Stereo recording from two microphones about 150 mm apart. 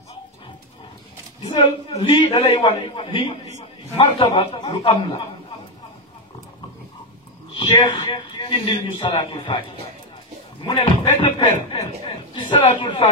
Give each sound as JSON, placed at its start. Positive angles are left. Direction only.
{"t": 1.4, "sound": "a man's voice", "side_deg": 35}
{"t": 7.5, "sound": "a man's voice", "side_deg": 30}
{"t": 10.6, "sound": "a man's voice", "side_deg": 35}